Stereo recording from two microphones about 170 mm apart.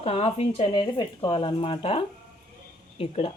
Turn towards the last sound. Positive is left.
turn(degrees=30)  # may be behind; listen again after turning